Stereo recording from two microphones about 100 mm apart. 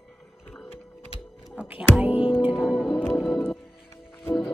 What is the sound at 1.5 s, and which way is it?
Music, 10° right (ahead or behind).